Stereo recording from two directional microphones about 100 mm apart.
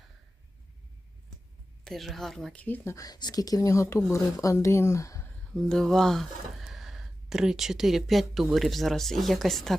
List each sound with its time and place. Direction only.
1.8 s a woman's voice: centre (ahead or behind)
2.5 s speech: 15° left (ahead or behind)
2.9 s speech: 40° left (ahead or behind)
5.5 s speech: 5° left (ahead or behind)